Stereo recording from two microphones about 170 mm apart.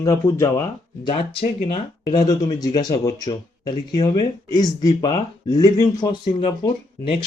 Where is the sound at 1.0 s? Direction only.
30° left (ahead or behind).